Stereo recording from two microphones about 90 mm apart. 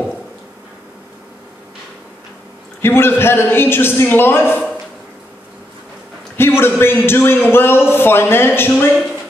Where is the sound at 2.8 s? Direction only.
25° left (ahead or behind).